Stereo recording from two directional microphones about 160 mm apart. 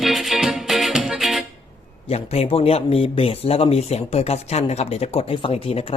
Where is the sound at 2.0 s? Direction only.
40° left (ahead or behind).